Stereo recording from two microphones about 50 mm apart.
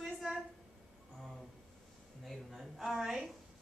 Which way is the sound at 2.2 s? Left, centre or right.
Centre.